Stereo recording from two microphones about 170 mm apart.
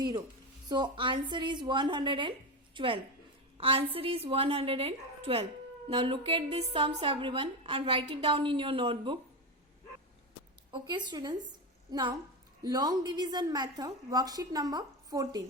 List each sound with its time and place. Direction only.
0.7 s a woman's voice: 25° right (ahead or behind)
10.7 s a woman's voice: 30° right (ahead or behind)